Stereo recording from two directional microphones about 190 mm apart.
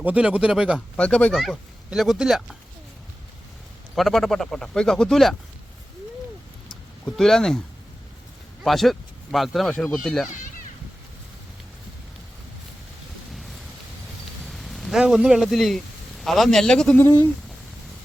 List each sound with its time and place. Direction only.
0.0 s speech: 5° right (ahead or behind)
3.9 s speech: centre (ahead or behind)
7.0 s speech: centre (ahead or behind)
8.6 s speech: centre (ahead or behind)
10.2 s children playing: 40° left (ahead or behind)
13.3 s a sound: centre (ahead or behind)
14.4 s speech: centre (ahead or behind)